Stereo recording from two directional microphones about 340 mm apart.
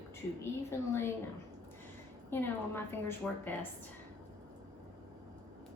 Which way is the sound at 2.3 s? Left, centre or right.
Centre.